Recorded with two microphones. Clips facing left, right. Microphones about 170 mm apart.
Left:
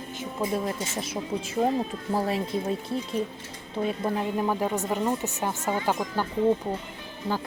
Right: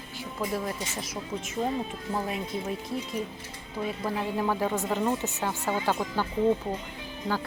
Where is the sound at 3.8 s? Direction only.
20° left (ahead or behind).